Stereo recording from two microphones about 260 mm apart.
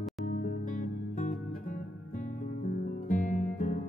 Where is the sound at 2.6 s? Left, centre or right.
Left.